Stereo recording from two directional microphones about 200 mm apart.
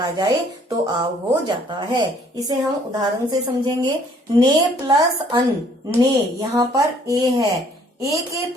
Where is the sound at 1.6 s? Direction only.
20° right (ahead or behind).